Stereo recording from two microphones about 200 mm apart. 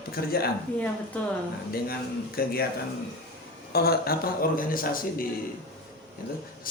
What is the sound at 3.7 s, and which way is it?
Speech, 50° left (ahead or behind).